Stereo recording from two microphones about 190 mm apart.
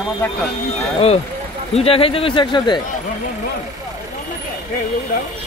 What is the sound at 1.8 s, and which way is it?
Speech, 30° left (ahead or behind).